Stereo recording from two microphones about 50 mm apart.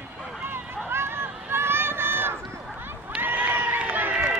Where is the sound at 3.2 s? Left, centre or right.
Right.